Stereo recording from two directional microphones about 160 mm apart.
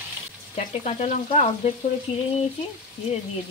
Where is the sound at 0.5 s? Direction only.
45° left (ahead or behind).